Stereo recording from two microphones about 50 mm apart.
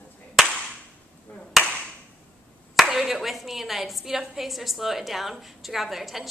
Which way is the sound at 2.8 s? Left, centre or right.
Centre.